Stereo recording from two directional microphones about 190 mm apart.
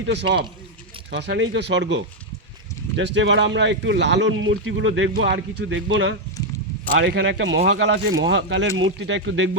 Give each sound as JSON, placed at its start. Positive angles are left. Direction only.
{"t": 1.1, "sound": "speech", "side_deg": -65}
{"t": 8.2, "sound": "speech", "side_deg": -80}